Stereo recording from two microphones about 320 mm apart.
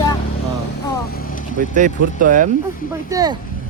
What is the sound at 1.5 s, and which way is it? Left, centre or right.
Speech, right.